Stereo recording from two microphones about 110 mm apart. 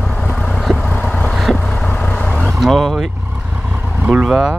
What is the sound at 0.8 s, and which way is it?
Vehicle, 10° left (ahead or behind).